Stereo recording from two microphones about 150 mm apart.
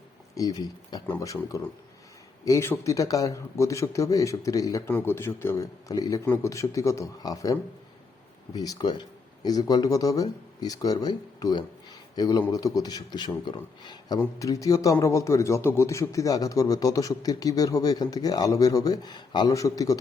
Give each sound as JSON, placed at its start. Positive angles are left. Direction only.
{"t": 0.3, "sound": "speech", "side_deg": 25}
{"t": 8.5, "sound": "speech", "side_deg": 25}